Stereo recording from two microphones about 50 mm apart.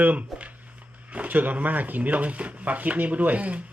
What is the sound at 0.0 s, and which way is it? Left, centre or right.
Speech, right.